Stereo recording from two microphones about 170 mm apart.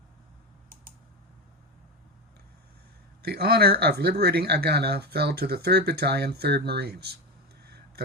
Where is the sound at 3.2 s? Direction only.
65° right (ahead or behind).